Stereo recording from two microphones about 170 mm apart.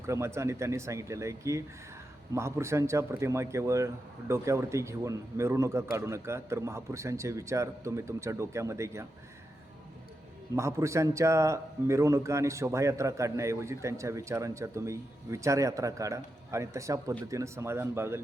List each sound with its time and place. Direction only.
0.0 s a man's voice: 15° right (ahead or behind)
10.5 s a man's voice: 15° right (ahead or behind)